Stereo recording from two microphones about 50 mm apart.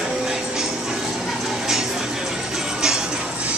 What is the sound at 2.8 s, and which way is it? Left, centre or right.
Music, centre.